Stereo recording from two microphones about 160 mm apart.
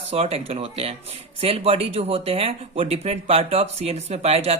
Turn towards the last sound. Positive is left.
turn(degrees=-40)  # may be behind; listen again after turning